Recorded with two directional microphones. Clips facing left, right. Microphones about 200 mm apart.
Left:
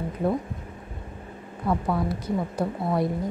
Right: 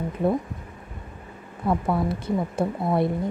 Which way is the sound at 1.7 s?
25° right (ahead or behind).